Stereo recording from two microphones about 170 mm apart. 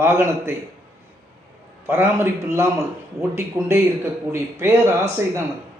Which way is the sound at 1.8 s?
15° right (ahead or behind).